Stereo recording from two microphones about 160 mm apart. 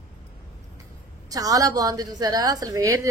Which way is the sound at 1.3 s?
20° right (ahead or behind).